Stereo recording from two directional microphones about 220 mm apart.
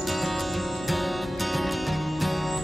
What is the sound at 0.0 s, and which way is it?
Music, centre (ahead or behind).